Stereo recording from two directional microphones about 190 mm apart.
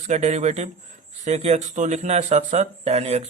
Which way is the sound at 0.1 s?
35° right (ahead or behind).